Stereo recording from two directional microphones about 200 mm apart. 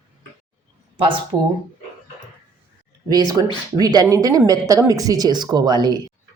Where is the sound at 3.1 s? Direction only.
20° right (ahead or behind).